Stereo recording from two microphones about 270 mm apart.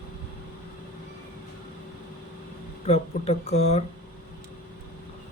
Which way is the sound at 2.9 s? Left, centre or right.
Left.